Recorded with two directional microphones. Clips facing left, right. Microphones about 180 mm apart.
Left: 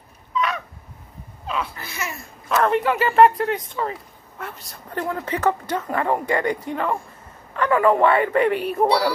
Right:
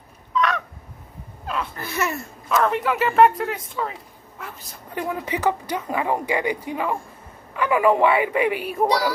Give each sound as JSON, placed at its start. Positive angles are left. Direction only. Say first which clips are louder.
{"t": 0.3, "sound": "fowl", "louder": "right 2 dB", "side_deg": 5}
{"t": 1.8, "sound": "speech", "louder": "right 6 dB", "side_deg": -55}
{"t": 2.5, "sound": "speech", "louder": "left 2 dB", "side_deg": 0}
{"t": 4.9, "sound": "speech", "louder": "left 1 dB", "side_deg": -10}